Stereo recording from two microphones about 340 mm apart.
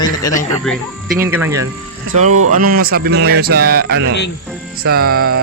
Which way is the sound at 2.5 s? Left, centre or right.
Right.